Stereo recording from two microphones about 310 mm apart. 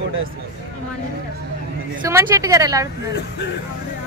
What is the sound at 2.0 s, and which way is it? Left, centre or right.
Speech, centre.